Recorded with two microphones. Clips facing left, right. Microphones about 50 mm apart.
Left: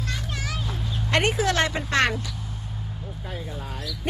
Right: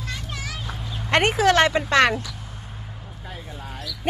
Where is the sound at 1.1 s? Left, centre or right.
Right.